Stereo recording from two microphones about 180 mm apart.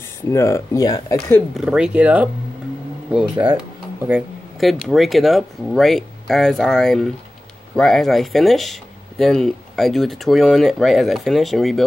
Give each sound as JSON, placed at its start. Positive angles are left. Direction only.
{"t": 0.3, "sound": "speech", "side_deg": 15}
{"t": 1.5, "sound": "speech", "side_deg": -5}